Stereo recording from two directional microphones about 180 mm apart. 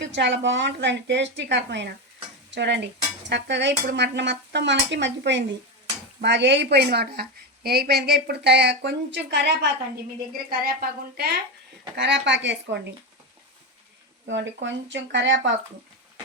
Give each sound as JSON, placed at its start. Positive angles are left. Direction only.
{"t": 0.0, "sound": "a woman's voice", "side_deg": -75}
{"t": 10.5, "sound": "a woman's voice", "side_deg": -55}
{"t": 11.9, "sound": "a woman's voice", "side_deg": -75}
{"t": 14.3, "sound": "speech", "side_deg": -90}